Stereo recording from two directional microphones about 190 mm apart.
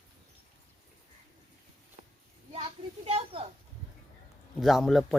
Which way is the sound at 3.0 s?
30° right (ahead or behind).